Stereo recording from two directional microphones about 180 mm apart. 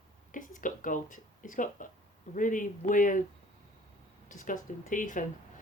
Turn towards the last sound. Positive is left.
turn(degrees=45)  # may be behind; listen again after turning